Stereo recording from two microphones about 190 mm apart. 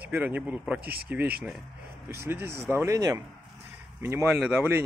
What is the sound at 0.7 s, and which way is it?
Speech, 55° right (ahead or behind).